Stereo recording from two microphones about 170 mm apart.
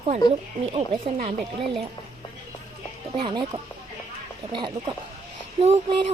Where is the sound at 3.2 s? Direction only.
25° right (ahead or behind).